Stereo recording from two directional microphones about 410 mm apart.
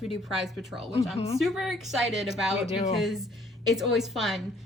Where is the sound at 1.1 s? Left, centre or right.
Centre.